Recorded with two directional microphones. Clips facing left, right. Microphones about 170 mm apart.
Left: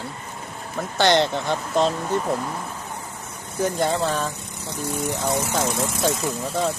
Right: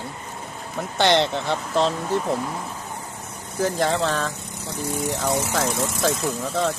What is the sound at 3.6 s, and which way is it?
Speech, 90° right.